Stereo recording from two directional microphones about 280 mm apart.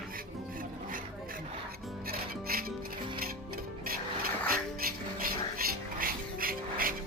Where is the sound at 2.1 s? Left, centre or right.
Right.